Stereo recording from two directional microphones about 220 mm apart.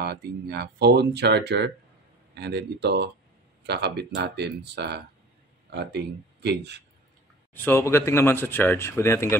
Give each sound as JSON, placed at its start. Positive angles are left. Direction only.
{"t": 0.0, "sound": "speech", "side_deg": -45}
{"t": 7.5, "sound": "speech", "side_deg": 10}